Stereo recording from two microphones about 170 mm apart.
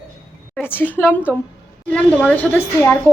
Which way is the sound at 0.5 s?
10° left (ahead or behind).